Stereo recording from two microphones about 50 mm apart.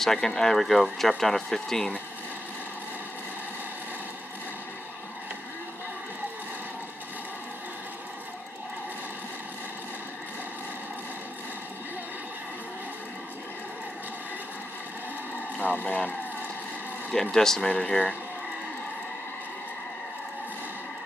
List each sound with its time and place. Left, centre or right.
0.0 s speech: centre
15.5 s a sound: left
17.1 s speech: centre
17.7 s speech: left